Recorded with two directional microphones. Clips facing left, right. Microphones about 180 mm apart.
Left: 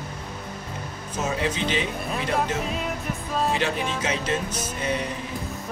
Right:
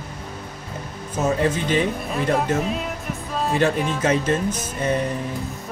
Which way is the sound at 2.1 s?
Centre (ahead or behind).